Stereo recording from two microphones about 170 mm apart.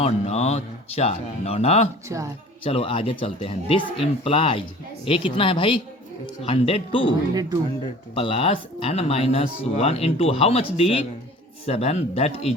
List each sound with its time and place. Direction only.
0.0 s speech: 40° left (ahead or behind)
2.1 s speech: 20° right (ahead or behind)
2.6 s speech: 35° left (ahead or behind)
8.1 s speech: 35° left (ahead or behind)